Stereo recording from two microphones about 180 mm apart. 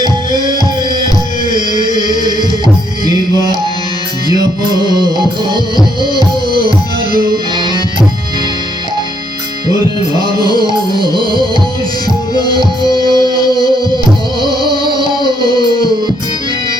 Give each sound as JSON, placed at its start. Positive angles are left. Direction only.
{"t": 1.5, "sound": "music", "side_deg": 20}
{"t": 2.1, "sound": "music", "side_deg": -25}
{"t": 4.3, "sound": "music", "side_deg": -25}
{"t": 9.6, "sound": "music", "side_deg": -20}
{"t": 10.5, "sound": "music", "side_deg": 20}
{"t": 14.4, "sound": "music", "side_deg": 20}